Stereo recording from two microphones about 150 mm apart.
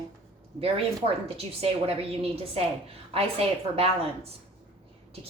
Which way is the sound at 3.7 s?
40° right (ahead or behind).